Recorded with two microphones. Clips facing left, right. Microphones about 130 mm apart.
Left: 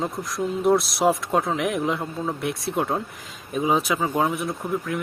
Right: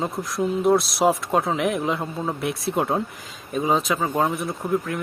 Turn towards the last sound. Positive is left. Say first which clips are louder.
# right 2 dB
turn(degrees=0)  # may be behind; listen again after turning